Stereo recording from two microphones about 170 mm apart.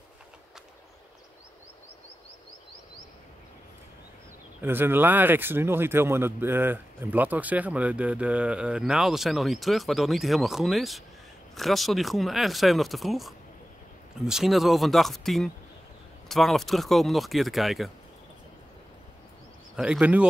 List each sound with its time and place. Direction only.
4.6 s speech: 10° right (ahead or behind)
19.7 s speech: 5° right (ahead or behind)